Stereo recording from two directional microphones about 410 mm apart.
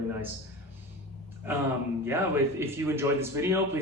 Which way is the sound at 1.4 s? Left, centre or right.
Centre.